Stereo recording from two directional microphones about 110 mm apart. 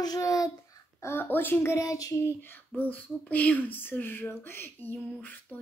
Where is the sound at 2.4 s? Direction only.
20° left (ahead or behind).